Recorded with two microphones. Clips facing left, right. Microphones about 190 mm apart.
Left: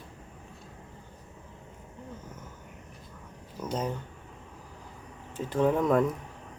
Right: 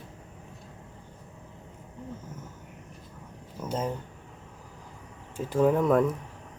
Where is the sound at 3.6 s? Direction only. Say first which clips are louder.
Right 1 dB; 10° right (ahead or behind).